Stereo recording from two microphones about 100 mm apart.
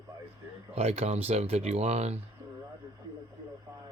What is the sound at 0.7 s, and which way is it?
Speech, 90° right.